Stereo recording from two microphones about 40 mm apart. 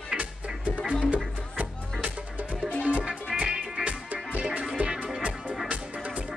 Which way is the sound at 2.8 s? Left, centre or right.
Right.